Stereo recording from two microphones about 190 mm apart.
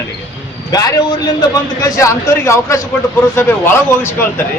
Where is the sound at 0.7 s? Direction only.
20° left (ahead or behind).